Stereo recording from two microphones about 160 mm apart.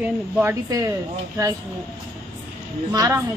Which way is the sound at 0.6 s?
20° right (ahead or behind).